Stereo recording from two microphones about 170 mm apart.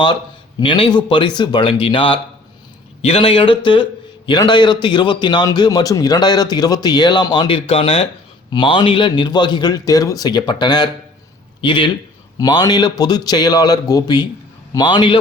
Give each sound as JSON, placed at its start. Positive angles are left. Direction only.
{"t": 0.6, "sound": "a man's voice", "side_deg": 30}